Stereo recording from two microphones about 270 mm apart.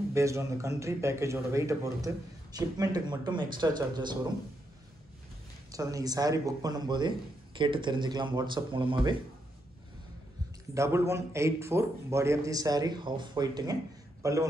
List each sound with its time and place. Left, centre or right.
0.1 s a man's voice: centre
5.7 s a man's voice: centre
10.7 s a man's voice: centre